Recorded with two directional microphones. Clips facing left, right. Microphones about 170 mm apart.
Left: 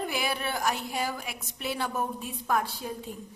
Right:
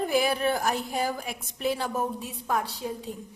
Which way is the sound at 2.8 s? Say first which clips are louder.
Right 3 dB; 20° right (ahead or behind).